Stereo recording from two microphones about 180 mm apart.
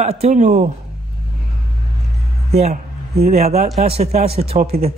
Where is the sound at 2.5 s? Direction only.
40° right (ahead or behind).